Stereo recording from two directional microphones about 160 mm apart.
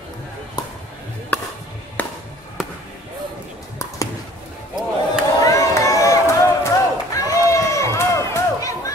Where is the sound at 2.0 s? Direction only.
10° left (ahead or behind).